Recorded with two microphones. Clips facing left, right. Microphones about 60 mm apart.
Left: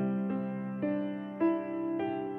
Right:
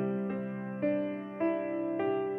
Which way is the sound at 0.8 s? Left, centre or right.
Right.